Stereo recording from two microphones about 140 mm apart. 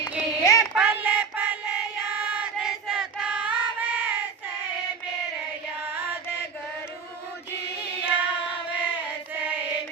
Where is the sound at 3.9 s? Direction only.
10° right (ahead or behind).